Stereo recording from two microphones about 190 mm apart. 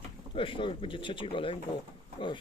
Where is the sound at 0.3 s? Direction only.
25° left (ahead or behind).